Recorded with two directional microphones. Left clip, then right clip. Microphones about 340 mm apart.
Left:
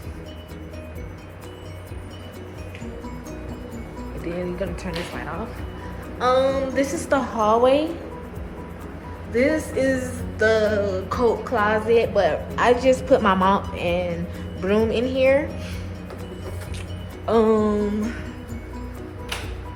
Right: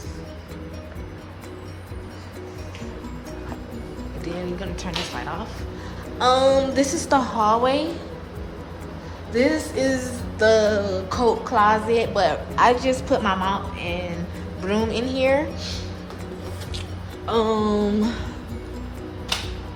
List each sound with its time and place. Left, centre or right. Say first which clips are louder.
4.6 s music: left 1 dB; centre
9.3 s music: even; centre
17.2 s music: left 3 dB; centre